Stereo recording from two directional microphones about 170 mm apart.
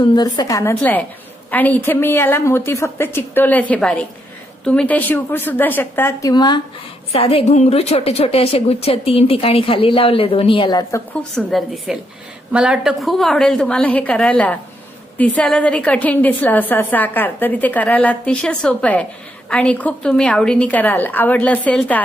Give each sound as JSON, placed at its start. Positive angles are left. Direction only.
{"t": 0.1, "sound": "a woman's voice", "side_deg": 25}
{"t": 6.3, "sound": "a woman's voice", "side_deg": 25}
{"t": 11.3, "sound": "a woman's voice", "side_deg": 0}